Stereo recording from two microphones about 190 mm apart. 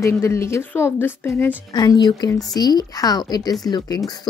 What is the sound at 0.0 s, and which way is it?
A woman's voice, 15° left (ahead or behind).